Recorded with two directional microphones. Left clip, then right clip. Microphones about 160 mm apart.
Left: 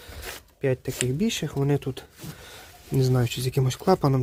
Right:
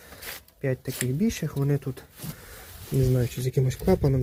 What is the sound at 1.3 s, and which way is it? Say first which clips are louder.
Speech: left 3 dB; 15° left (ahead or behind).